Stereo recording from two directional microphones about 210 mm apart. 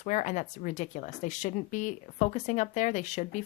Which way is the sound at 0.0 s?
35° left (ahead or behind).